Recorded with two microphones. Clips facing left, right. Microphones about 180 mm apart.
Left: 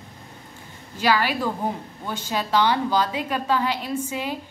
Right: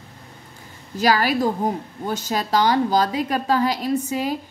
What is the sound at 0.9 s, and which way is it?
Speech, 40° right (ahead or behind).